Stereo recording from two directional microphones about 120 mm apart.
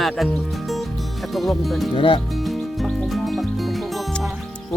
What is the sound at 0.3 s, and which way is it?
Music, centre (ahead or behind).